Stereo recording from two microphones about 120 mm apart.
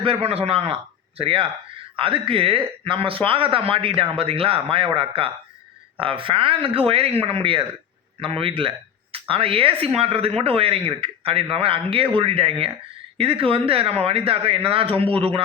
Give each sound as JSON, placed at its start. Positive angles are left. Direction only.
{"t": 0.0, "sound": "speech", "side_deg": -55}